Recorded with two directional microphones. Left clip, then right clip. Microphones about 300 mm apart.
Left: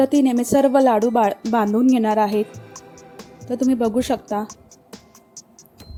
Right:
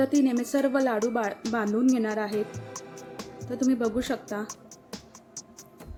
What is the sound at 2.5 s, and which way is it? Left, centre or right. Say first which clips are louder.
Music: even; centre.